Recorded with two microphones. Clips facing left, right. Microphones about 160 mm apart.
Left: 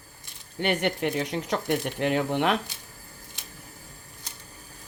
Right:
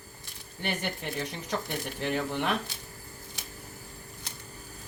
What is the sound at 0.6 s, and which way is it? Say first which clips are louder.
Speech: left 8 dB; 75° left (ahead or behind).